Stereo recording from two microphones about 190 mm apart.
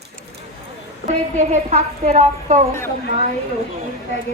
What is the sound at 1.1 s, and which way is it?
A woman's voice, 40° right (ahead or behind).